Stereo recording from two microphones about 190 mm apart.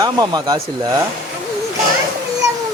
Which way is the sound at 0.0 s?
20° right (ahead or behind).